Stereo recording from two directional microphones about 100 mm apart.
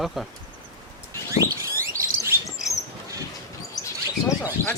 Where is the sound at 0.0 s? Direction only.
Centre (ahead or behind).